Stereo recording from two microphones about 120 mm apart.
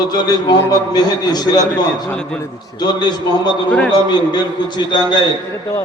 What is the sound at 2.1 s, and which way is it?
Speech, 5° left (ahead or behind).